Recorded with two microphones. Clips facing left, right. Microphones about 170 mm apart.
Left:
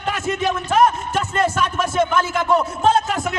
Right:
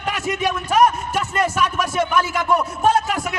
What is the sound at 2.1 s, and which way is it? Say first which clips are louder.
Speech: left 1 dB; 25° left (ahead or behind).